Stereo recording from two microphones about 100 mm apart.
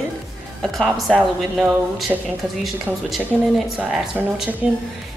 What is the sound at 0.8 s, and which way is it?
Speech, centre (ahead or behind).